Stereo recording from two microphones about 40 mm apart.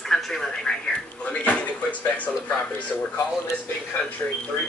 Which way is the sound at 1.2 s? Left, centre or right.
Left.